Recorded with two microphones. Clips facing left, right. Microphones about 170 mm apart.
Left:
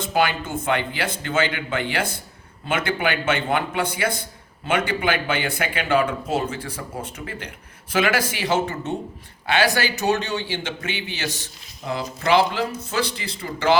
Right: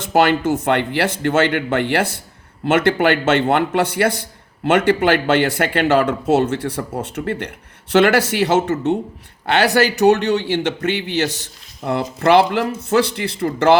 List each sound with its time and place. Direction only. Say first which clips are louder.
0.0 s a man's voice: right 7 dB; 70° right (ahead or behind)